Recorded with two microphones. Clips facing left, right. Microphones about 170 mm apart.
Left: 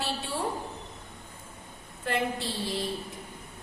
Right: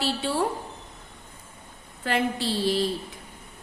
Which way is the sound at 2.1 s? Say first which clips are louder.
Right 4 dB; 85° right.